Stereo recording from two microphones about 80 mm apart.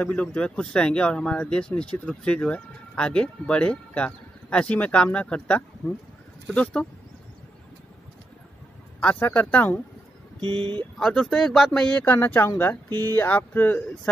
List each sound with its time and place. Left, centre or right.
0.0 s speech: centre
9.0 s speech: left
10.4 s speech: right
11.0 s speech: centre